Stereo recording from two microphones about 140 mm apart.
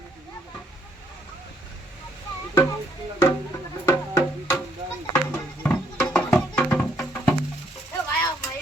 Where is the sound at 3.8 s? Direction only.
20° left (ahead or behind).